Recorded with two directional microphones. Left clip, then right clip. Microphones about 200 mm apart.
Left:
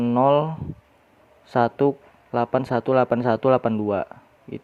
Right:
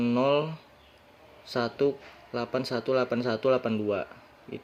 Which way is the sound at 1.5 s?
30° left (ahead or behind).